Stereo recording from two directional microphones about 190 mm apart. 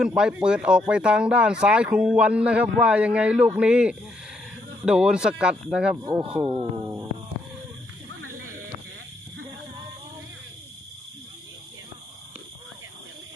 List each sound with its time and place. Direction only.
0.0 s speech: 5° right (ahead or behind)
6.1 s speech: 25° right (ahead or behind)
8.2 s a sound: 90° right